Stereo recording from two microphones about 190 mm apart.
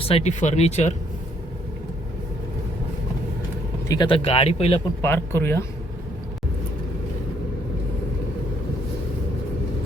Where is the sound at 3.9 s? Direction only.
25° left (ahead or behind).